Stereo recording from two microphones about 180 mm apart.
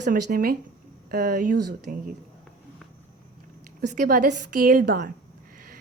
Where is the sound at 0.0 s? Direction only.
50° right (ahead or behind).